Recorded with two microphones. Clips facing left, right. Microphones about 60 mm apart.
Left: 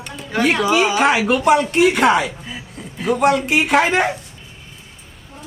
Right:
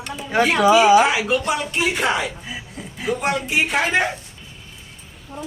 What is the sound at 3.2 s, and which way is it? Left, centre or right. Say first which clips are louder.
Speech: left 6 dB; left.